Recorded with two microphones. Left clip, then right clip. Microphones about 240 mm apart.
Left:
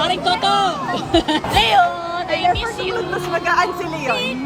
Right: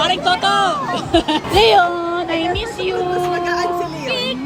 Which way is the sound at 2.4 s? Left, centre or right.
Left.